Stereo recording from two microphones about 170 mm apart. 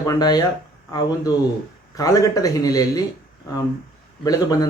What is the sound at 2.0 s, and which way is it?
Speech, 20° left (ahead or behind).